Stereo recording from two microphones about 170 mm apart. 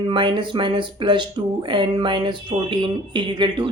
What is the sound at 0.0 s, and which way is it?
Speech, 30° right (ahead or behind).